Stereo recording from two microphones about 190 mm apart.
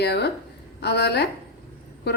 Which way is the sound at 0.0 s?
60° left (ahead or behind).